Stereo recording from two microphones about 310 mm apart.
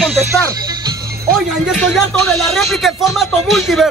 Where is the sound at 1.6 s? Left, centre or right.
Centre.